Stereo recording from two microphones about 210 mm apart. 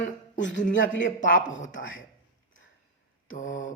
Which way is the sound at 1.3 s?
35° left (ahead or behind).